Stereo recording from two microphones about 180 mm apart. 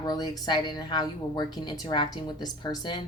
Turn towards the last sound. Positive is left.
turn(degrees=25)  # may be behind; listen again after turning